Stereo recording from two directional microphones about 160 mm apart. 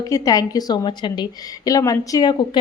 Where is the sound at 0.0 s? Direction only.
20° left (ahead or behind).